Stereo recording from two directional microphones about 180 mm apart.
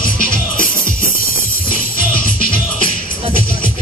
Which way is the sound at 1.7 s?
50° left (ahead or behind).